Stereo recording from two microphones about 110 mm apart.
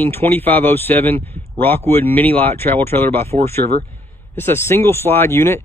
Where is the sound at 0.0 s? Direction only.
20° left (ahead or behind).